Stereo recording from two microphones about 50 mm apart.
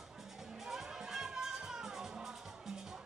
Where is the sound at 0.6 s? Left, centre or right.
Centre.